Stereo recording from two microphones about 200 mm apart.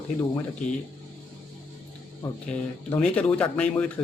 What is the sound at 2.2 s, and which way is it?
Speech, 5° left (ahead or behind).